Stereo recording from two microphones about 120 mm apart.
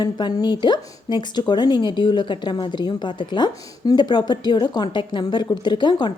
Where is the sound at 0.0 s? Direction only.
35° left (ahead or behind).